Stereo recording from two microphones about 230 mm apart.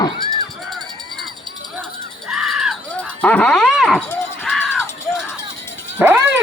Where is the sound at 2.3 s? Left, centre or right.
Centre.